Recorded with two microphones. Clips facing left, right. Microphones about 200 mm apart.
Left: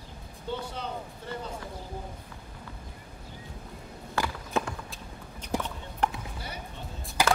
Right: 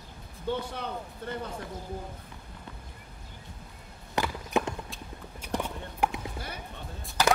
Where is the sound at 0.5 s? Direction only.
60° right (ahead or behind).